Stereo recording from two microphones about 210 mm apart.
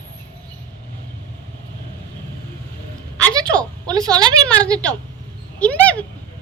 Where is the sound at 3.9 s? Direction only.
20° right (ahead or behind).